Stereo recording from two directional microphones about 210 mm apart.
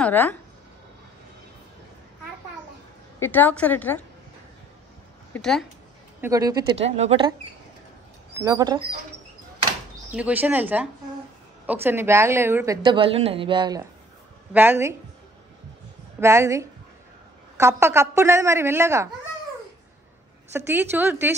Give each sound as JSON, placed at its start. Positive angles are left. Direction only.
{"t": 0.0, "sound": "speech", "side_deg": 10}
{"t": 3.2, "sound": "a woman's voice", "side_deg": 10}
{"t": 5.3, "sound": "speech", "side_deg": 0}
{"t": 6.2, "sound": "a woman's voice", "side_deg": -15}
{"t": 6.9, "sound": "a woman's voice", "side_deg": -30}
{"t": 10.1, "sound": "a woman's voice", "side_deg": -5}
{"t": 12.8, "sound": "a woman's voice", "side_deg": -25}
{"t": 16.2, "sound": "a woman's voice", "side_deg": -15}
{"t": 20.5, "sound": "a woman's voice", "side_deg": -10}